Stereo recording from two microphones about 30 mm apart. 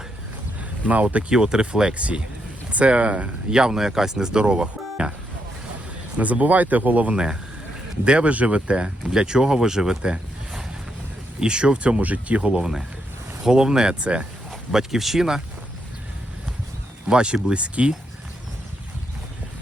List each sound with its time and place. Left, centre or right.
1.3 s speech: right
1.9 s speech: right
3.5 s speech: right
6.1 s speech: right
8.0 s speech: right
8.3 s speech: right
11.3 s speech: right
12.0 s speech: right
13.4 s speech: right
14.7 s speech: centre
17.1 s speech: right